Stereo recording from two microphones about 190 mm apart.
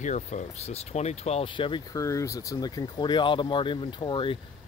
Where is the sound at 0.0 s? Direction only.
40° left (ahead or behind).